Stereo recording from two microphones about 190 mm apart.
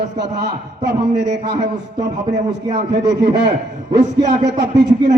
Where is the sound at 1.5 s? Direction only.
20° right (ahead or behind).